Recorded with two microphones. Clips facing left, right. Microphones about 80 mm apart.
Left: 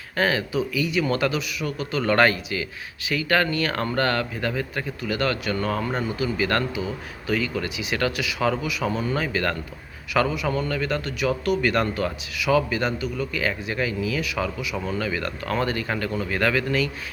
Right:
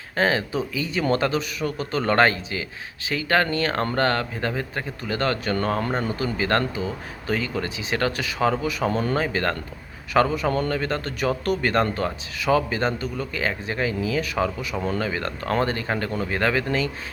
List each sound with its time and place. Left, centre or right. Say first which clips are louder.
0.2 s speech: right 1 dB; right
9.1 s speech: right 1 dB; right